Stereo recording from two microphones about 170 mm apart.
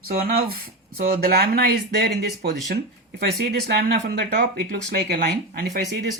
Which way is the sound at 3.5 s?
65° right (ahead or behind).